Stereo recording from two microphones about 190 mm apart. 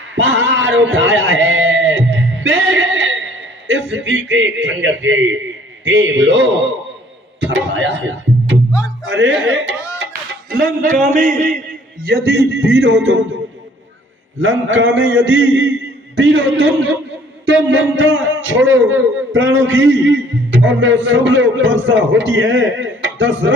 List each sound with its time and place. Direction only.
0.2 s a sound: 70° right (ahead or behind)
0.9 s music: 70° right (ahead or behind)
2.6 s a sound: 75° right (ahead or behind)
3.9 s a man's voice: 70° right (ahead or behind)
9.0 s speech: 70° right (ahead or behind)
10.0 s a man's voice: 50° right (ahead or behind)
14.4 s a man's voice: 80° right
17.4 s a man's voice: 75° right (ahead or behind)